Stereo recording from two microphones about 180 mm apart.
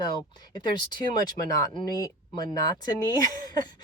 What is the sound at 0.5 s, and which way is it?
Speech, 25° left (ahead or behind).